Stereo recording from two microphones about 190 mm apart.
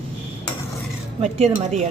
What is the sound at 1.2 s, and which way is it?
Speech, 35° right (ahead or behind).